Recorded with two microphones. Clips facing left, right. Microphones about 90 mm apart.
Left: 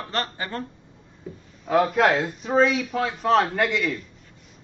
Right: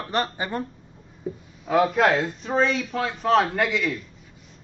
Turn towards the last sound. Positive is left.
turn(degrees=0)  # may be behind; listen again after turning